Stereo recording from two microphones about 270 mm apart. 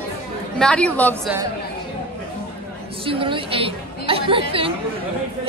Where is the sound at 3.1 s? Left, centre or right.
Centre.